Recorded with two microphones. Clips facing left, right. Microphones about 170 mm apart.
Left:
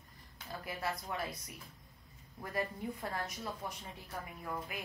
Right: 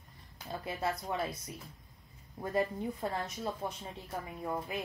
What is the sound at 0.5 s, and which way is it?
Speech, 25° right (ahead or behind).